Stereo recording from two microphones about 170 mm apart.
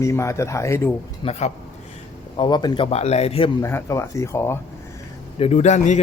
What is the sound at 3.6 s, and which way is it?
Speech, 15° left (ahead or behind).